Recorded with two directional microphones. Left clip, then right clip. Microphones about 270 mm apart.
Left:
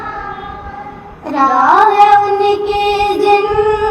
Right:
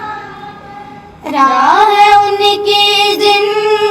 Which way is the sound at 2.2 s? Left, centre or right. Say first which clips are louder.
Right 2 dB; right.